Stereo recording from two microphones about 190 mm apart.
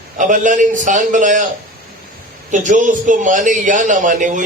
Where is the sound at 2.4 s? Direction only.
40° right (ahead or behind).